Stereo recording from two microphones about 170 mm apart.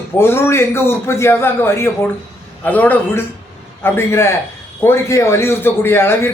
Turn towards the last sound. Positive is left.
turn(degrees=15)  # may be behind; listen again after turning